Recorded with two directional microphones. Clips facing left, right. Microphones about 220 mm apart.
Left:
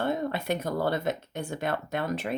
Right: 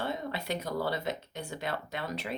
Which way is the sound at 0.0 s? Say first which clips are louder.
Left 6 dB; 50° left (ahead or behind).